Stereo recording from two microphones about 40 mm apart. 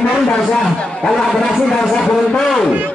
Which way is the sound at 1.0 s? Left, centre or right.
Centre.